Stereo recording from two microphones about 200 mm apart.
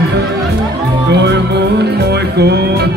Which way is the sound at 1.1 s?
60° right (ahead or behind).